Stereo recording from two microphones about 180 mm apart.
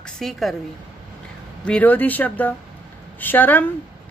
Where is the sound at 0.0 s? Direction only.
Centre (ahead or behind).